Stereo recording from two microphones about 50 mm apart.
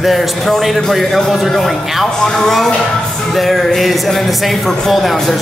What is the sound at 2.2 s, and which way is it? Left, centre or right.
Speech, centre.